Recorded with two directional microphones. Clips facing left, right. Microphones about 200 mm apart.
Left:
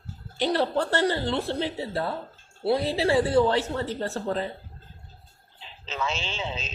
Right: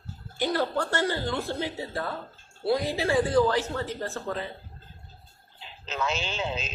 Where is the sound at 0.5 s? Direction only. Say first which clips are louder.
Left 3 dB; 30° left (ahead or behind).